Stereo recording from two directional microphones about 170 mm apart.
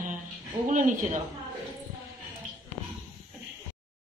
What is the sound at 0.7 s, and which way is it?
Speech, 50° right (ahead or behind).